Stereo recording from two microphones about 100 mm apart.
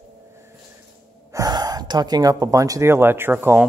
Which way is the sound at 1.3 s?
40° right (ahead or behind).